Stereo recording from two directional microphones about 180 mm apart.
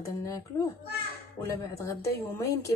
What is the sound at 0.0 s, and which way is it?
A child's voice, 15° left (ahead or behind).